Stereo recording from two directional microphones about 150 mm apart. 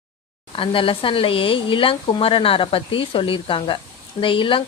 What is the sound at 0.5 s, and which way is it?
Speech, 35° left (ahead or behind).